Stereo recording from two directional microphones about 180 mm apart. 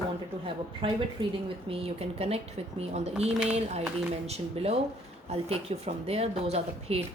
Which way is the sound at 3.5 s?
35° right (ahead or behind).